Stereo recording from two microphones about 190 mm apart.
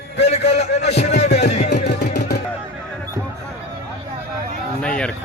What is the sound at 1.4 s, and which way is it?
Music, 35° left (ahead or behind).